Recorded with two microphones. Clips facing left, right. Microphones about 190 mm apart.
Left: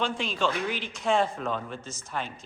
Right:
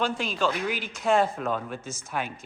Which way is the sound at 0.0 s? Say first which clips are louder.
Right 1 dB; 5° right (ahead or behind).